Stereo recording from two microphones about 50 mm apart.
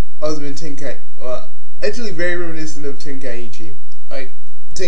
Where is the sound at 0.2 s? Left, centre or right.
Centre.